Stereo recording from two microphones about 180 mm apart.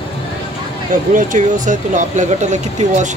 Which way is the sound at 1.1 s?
45° right (ahead or behind).